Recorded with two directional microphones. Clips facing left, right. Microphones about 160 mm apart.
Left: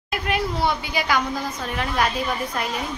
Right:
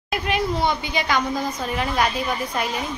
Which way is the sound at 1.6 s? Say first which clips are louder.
Even; 5° right (ahead or behind).